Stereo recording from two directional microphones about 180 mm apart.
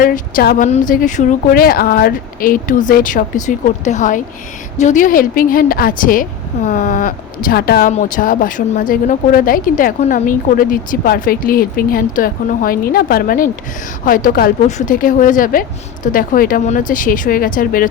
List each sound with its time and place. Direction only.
0.0 s a woman's voice: 50° left (ahead or behind)